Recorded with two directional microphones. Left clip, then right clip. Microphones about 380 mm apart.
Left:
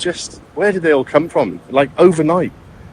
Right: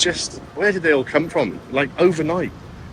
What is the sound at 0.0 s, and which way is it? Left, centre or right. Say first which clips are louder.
Speech: right 1 dB; centre.